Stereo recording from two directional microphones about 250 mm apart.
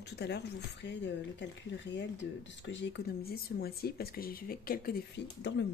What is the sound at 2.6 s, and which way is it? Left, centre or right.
Speech, left.